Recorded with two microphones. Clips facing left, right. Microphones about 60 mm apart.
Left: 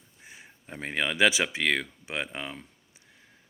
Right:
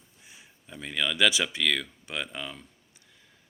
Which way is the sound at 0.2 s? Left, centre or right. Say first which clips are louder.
Left 5 dB; left.